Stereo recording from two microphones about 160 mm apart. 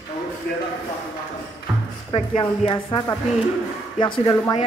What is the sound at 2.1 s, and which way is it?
Speech, 35° left (ahead or behind).